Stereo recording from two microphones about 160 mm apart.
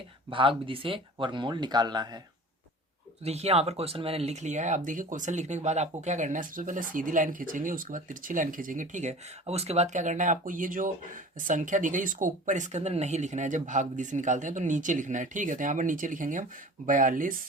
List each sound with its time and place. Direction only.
0.3 s speech: 35° right (ahead or behind)
3.2 s speech: 40° right (ahead or behind); by 17.4 s 60° right (ahead or behind)